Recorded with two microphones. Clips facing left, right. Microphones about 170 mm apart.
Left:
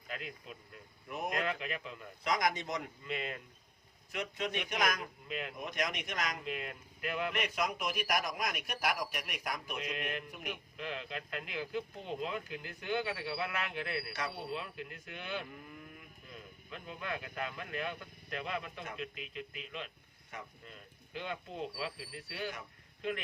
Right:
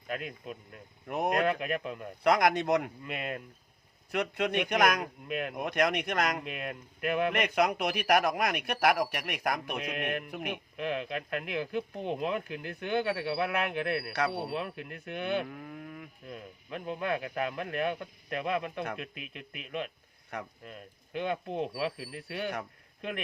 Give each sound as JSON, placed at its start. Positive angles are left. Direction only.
{"t": 0.1, "sound": "a man's voice", "side_deg": -55}
{"t": 4.1, "sound": "a man's voice", "side_deg": -65}